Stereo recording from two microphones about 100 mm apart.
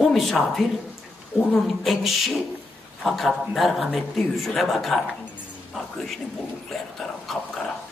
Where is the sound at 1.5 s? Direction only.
Centre (ahead or behind).